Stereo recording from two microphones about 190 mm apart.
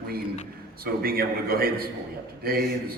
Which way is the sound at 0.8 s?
50° right (ahead or behind).